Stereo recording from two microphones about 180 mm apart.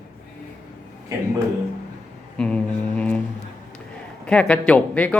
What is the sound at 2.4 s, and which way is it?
Speech, 5° left (ahead or behind).